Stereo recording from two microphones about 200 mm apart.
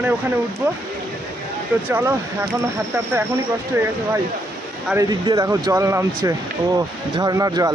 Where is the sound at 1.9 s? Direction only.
10° right (ahead or behind).